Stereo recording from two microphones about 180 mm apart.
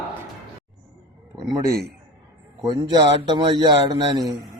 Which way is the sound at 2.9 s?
25° right (ahead or behind).